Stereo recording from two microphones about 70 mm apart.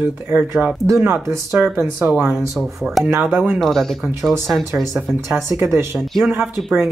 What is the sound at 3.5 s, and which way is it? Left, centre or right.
Speech, centre.